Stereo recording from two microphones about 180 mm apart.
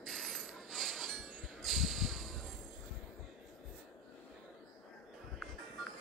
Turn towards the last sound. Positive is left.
turn(degrees=0)  # may be behind; listen again after turning